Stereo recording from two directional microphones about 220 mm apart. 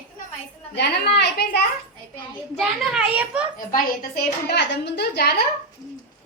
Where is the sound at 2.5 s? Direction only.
5° right (ahead or behind).